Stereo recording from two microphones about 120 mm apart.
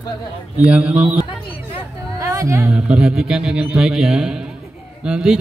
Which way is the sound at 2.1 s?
25° right (ahead or behind).